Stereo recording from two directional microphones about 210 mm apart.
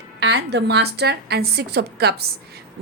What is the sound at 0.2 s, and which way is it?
Speech, 55° right (ahead or behind).